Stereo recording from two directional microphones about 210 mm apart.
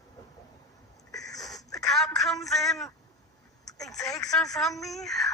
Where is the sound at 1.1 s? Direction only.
15° left (ahead or behind).